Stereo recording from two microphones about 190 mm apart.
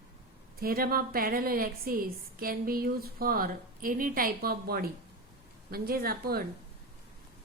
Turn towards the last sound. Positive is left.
turn(degrees=-50)  # may be behind; listen again after turning